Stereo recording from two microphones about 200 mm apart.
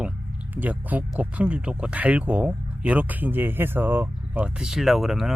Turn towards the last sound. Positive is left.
turn(degrees=0)  # may be behind; listen again after turning